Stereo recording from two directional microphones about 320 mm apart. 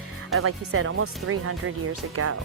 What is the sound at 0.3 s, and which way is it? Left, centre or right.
Speech, right.